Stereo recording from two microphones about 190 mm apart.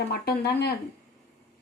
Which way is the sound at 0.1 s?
55° left (ahead or behind).